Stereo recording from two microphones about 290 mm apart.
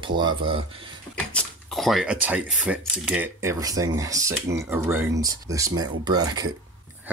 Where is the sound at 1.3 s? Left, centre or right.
Centre.